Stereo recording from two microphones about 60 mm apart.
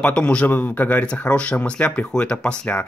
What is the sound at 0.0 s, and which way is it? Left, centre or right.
Speech, centre.